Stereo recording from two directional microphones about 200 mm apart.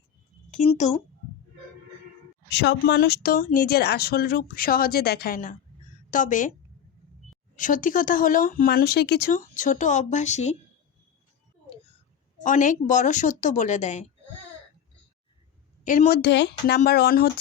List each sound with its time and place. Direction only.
0.5 s speech: 35° left (ahead or behind)
2.5 s a woman's voice: 55° left (ahead or behind); by 6.5 s 40° left (ahead or behind)
7.5 s speech: 40° left (ahead or behind)
12.4 s speech: 40° left (ahead or behind)
15.8 s speech: 40° left (ahead or behind)